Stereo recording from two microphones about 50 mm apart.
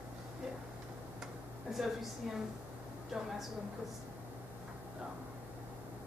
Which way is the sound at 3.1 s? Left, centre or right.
Centre.